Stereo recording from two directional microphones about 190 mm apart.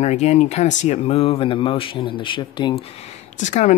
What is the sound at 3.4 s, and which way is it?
Speech, 40° left (ahead or behind).